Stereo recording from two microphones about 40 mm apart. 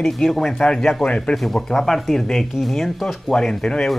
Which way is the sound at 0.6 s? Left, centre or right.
Left.